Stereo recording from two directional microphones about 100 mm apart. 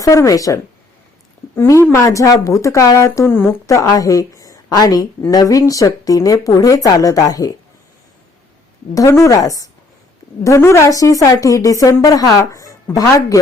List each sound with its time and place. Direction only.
0.0 s a woman's voice: 35° left (ahead or behind)
9.0 s a woman's voice: 30° left (ahead or behind)